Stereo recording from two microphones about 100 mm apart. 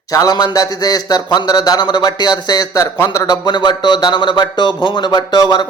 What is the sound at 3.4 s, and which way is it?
A man's voice, 50° left (ahead or behind).